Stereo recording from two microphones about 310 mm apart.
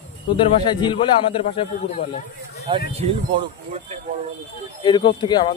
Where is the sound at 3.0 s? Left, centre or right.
Centre.